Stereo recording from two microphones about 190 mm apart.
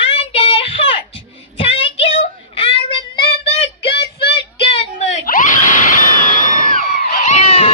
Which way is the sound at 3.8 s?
55° left (ahead or behind).